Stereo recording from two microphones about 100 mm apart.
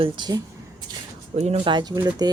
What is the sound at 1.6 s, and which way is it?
Speech, 50° right (ahead or behind).